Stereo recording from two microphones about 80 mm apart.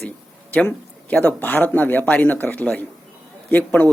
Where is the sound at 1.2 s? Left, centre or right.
Centre.